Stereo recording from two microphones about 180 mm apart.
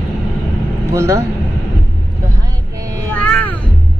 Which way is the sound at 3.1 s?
5° left (ahead or behind).